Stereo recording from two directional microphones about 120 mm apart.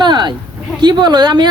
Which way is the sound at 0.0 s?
40° right (ahead or behind).